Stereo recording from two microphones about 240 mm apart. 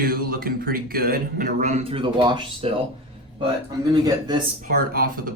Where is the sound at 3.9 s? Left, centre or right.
Centre.